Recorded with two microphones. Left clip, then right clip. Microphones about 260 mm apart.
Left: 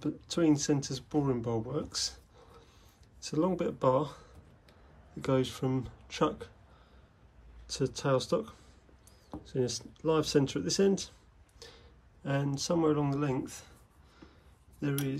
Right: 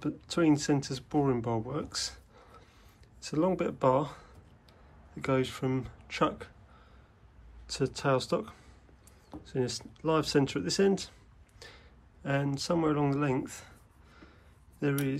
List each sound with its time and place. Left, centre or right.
0.0 s speech: centre
7.6 s speech: centre
11.6 s a sound: centre
14.8 s speech: centre